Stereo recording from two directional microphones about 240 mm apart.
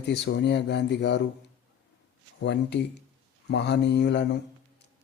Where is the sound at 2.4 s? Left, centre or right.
Left.